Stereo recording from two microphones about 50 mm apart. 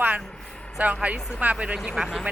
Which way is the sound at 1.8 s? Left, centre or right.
Centre.